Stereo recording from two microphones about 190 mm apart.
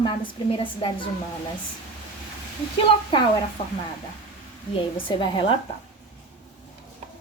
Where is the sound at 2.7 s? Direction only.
25° left (ahead or behind).